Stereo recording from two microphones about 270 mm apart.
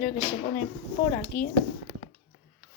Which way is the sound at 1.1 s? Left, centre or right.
Left.